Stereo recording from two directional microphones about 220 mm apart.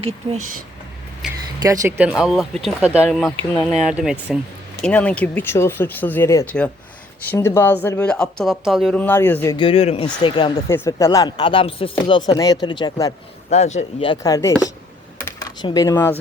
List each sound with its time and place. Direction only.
0.2 s speech: 15° right (ahead or behind)
1.6 s speech: 15° right (ahead or behind)
4.8 s speech: 5° left (ahead or behind)
9.6 s speech: 25° left (ahead or behind)
13.5 s speech: 30° left (ahead or behind); by 14.7 s 15° left (ahead or behind)
15.2 s a sound: 15° left (ahead or behind)